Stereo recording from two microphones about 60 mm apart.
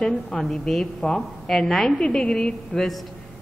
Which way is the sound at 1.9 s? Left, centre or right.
Centre.